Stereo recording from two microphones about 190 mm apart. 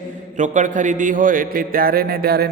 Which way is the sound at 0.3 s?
40° right (ahead or behind).